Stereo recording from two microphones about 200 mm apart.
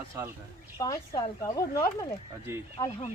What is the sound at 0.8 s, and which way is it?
Speech, 15° left (ahead or behind).